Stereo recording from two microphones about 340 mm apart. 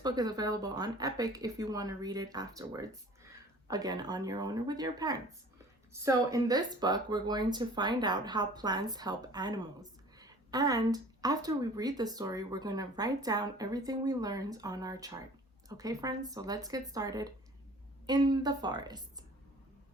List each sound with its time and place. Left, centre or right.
0.0 s speech: centre